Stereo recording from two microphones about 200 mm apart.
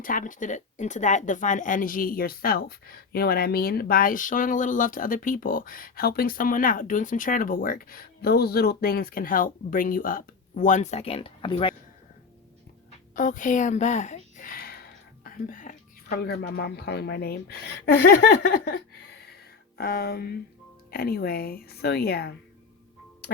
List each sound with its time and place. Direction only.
0.0 s speech: 40° left (ahead or behind); by 11.7 s 25° left (ahead or behind)
13.1 s a woman's voice: 40° left (ahead or behind)